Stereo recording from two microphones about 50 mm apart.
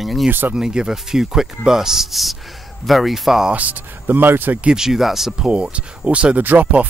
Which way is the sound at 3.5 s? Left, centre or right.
Right.